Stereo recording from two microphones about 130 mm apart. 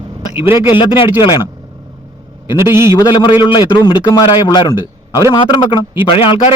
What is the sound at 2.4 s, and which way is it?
Speech, 20° right (ahead or behind).